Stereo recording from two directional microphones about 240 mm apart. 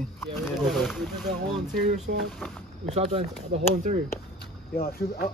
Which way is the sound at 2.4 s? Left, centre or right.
Centre.